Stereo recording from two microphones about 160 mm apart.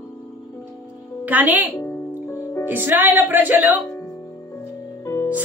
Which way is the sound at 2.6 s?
10° right (ahead or behind).